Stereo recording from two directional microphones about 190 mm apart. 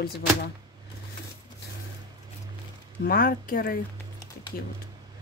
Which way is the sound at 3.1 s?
50° left (ahead or behind).